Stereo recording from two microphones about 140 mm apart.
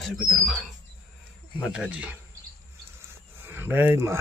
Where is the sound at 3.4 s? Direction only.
15° right (ahead or behind).